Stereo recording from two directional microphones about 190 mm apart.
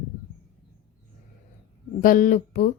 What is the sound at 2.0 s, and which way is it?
Speech, 45° left (ahead or behind).